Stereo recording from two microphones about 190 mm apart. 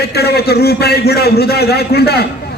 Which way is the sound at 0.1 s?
55° left (ahead or behind).